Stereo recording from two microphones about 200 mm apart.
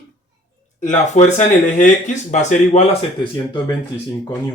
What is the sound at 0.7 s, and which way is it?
Speech, 35° left (ahead or behind).